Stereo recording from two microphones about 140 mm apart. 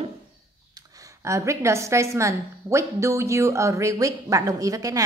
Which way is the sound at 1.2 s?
20° right (ahead or behind).